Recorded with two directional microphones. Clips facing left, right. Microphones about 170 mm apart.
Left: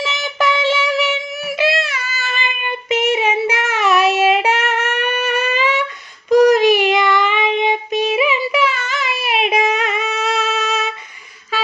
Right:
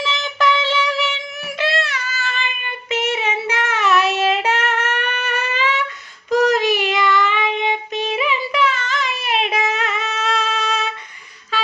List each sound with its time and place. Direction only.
0.0 s music: 10° left (ahead or behind)
6.3 s child singing: 15° left (ahead or behind)
11.5 s a sound: 10° left (ahead or behind)